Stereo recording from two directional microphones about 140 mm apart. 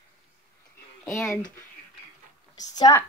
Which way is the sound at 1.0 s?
15° left (ahead or behind).